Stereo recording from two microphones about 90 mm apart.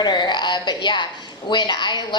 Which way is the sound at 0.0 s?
55° left (ahead or behind).